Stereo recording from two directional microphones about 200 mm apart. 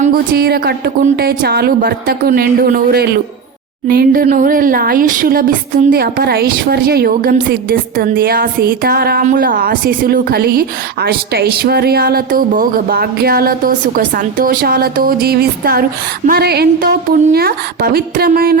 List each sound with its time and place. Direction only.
0.0 s a woman's voice: 50° right (ahead or behind)